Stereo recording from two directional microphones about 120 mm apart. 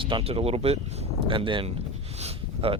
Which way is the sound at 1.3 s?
45° right (ahead or behind).